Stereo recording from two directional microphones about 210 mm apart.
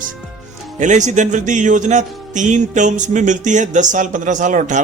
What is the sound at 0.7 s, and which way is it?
A man's voice, 35° right (ahead or behind).